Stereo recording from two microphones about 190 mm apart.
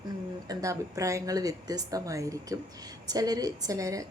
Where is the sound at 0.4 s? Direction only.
20° right (ahead or behind).